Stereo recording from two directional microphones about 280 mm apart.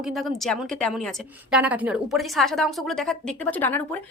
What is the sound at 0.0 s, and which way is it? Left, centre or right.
A woman's voice, centre.